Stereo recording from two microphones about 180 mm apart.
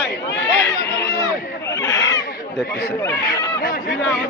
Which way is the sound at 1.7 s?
20° left (ahead or behind).